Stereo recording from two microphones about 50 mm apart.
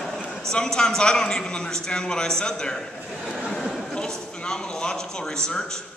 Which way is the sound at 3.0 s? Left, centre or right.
Centre.